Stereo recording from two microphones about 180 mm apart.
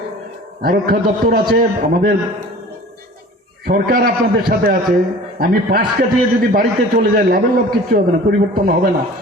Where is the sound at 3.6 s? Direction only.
55° right (ahead or behind).